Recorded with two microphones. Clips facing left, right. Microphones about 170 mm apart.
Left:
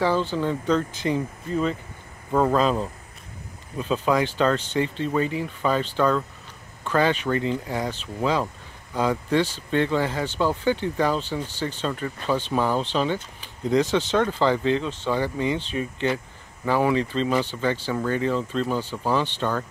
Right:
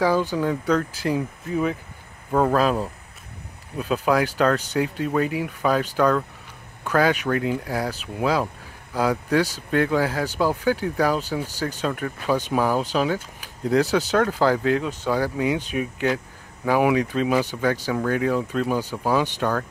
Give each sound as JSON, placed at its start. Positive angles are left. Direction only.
{"t": 0.0, "sound": "speech", "side_deg": -10}